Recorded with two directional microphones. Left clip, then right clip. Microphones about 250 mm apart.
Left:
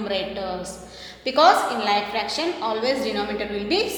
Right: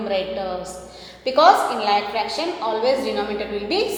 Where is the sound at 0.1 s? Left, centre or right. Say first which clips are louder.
Right 4 dB; left.